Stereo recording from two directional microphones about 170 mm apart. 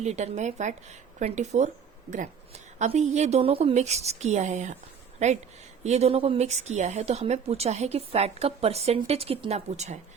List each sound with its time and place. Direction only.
0.0 s a woman's voice: 40° right (ahead or behind)